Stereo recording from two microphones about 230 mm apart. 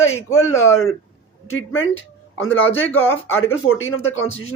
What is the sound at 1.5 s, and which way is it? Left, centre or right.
Speech, left.